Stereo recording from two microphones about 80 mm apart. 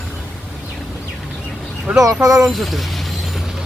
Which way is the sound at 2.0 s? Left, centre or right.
Right.